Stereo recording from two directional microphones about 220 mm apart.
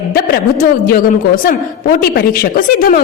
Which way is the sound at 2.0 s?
40° left (ahead or behind).